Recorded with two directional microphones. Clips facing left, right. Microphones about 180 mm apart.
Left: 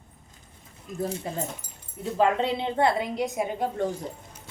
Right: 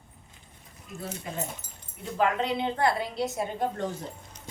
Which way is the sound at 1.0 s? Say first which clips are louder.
Left 5 dB; 30° left (ahead or behind).